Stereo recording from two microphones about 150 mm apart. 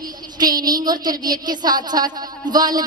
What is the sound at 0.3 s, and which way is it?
A woman's voice, 25° right (ahead or behind).